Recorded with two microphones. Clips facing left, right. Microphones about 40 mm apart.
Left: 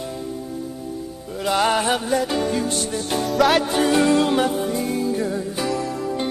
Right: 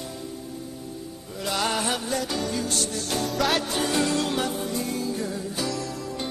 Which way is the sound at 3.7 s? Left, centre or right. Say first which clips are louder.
Left 7 dB; left.